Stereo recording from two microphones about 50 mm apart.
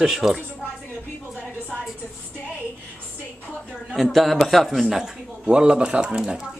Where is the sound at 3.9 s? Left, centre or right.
Centre.